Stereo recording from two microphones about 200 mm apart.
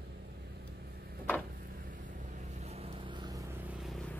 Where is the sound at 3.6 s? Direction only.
Centre (ahead or behind).